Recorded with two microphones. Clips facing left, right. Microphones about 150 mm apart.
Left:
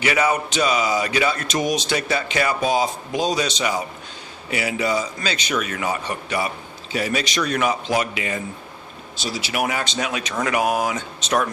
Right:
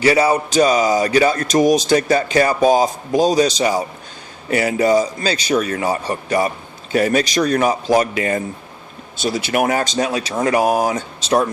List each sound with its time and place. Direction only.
0.0 s speech: 35° right (ahead or behind)